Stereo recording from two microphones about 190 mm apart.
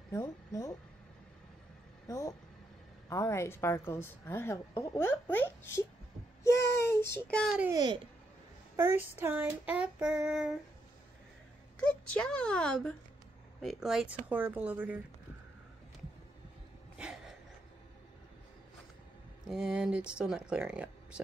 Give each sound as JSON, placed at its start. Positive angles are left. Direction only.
{"t": 0.1, "sound": "speech", "side_deg": 15}
{"t": 2.0, "sound": "a woman's voice", "side_deg": 15}
{"t": 6.4, "sound": "child singing", "side_deg": 15}
{"t": 7.2, "sound": "speech", "side_deg": 5}
{"t": 7.7, "sound": "speech", "side_deg": -25}
{"t": 8.7, "sound": "child singing", "side_deg": -15}
{"t": 11.8, "sound": "speech", "side_deg": 5}
{"t": 13.6, "sound": "child singing", "side_deg": 0}
{"t": 16.9, "sound": "a sound", "side_deg": -5}
{"t": 19.4, "sound": "speech", "side_deg": -5}